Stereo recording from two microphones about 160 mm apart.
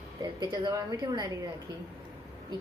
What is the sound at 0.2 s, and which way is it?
A woman's voice, 25° right (ahead or behind).